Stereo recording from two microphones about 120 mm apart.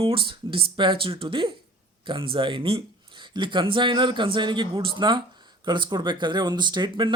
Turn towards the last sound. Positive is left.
turn(degrees=-40)  # may be behind; listen again after turning